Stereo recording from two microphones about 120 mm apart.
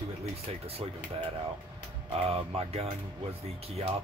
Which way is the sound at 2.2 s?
55° right (ahead or behind).